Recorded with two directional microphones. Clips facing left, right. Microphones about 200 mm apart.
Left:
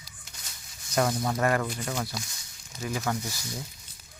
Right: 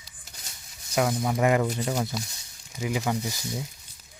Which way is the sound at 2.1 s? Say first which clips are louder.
Right 4 dB; 5° right (ahead or behind).